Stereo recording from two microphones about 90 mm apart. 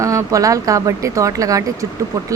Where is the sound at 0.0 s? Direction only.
35° right (ahead or behind).